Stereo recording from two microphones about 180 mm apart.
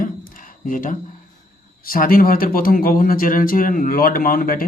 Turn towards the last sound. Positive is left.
turn(degrees=55)  # may be behind; listen again after turning